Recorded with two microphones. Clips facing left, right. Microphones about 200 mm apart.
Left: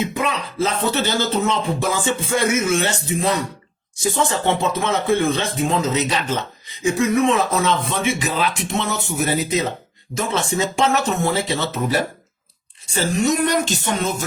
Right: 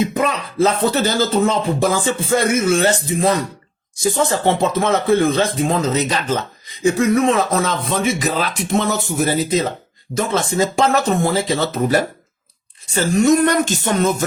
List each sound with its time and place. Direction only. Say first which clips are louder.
0.1 s speech: right 3 dB; 40° right (ahead or behind)
8.7 s speech: right 5 dB; 50° right (ahead or behind)
9.1 s speech: right 2 dB; 30° right (ahead or behind)